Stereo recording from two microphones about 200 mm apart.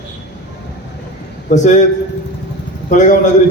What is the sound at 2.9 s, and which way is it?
Speech, 40° left (ahead or behind).